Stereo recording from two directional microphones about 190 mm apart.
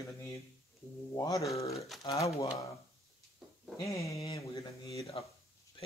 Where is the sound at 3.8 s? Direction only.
15° left (ahead or behind).